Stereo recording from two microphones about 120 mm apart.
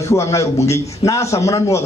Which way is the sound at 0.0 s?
25° left (ahead or behind).